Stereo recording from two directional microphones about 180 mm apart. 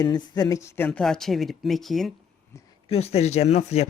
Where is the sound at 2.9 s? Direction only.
35° left (ahead or behind).